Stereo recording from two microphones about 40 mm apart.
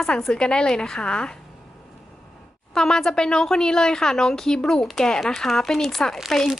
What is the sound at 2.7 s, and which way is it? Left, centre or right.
Speech, centre.